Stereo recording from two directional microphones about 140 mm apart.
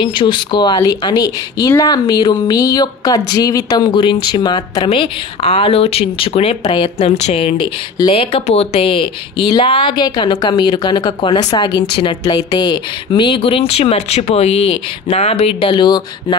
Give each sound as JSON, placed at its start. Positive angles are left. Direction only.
{"t": 0.0, "sound": "a woman's voice", "side_deg": 35}
{"t": 4.8, "sound": "speech", "side_deg": 40}